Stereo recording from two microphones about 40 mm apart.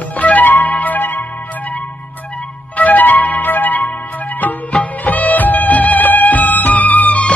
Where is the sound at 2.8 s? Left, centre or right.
Left.